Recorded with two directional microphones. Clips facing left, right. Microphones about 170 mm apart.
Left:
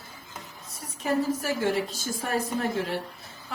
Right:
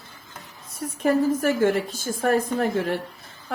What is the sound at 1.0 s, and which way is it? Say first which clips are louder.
A woman's voice: right 6 dB; 55° right (ahead or behind).